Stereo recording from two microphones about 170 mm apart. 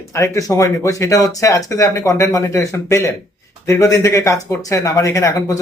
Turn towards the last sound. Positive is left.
turn(degrees=15)  # may be behind; listen again after turning